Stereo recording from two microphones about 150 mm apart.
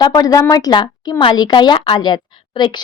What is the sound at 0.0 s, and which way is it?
A woman's voice, 25° left (ahead or behind).